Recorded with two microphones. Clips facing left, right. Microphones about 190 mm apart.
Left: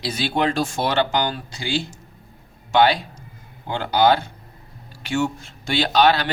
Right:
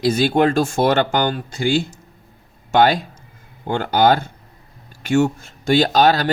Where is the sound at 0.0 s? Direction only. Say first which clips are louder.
Right 7 dB; 45° right (ahead or behind).